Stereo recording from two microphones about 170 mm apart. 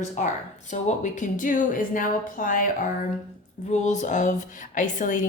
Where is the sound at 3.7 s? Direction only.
45° left (ahead or behind).